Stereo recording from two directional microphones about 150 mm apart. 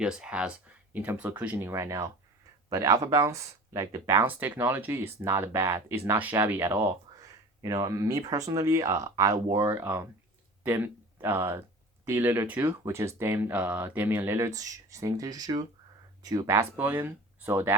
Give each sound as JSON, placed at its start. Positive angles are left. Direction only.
{"t": 0.0, "sound": "speech", "side_deg": -5}